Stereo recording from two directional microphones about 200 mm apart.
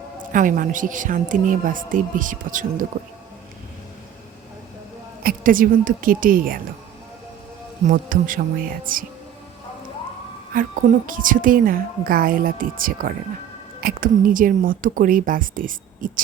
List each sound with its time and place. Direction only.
0.2 s a woman's voice: 40° right (ahead or behind)
5.2 s a woman's voice: 45° right (ahead or behind)
7.9 s a woman's voice: 40° right (ahead or behind)
10.5 s a woman's voice: 45° right (ahead or behind)